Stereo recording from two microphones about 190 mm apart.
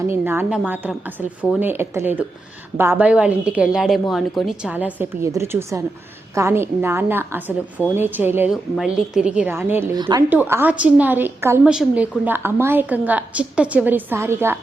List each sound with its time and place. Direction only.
0.1 s a woman's voice: 10° right (ahead or behind)
10.0 s speech: 20° right (ahead or behind)
10.2 s a woman's voice: 10° right (ahead or behind)